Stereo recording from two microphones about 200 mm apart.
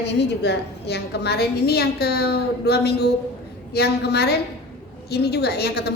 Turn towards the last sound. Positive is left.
turn(degrees=55)  # may be behind; listen again after turning